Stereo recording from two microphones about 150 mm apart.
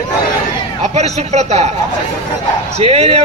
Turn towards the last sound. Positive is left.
turn(degrees=-40)  # may be behind; listen again after turning